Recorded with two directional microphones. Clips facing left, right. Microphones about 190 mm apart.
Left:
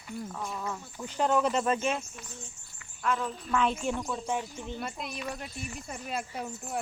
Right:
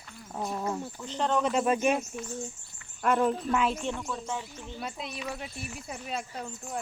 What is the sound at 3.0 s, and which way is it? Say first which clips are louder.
Speech: right 6 dB; 60° right (ahead or behind).